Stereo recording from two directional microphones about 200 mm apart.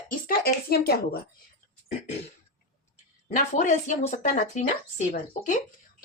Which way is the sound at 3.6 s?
35° left (ahead or behind).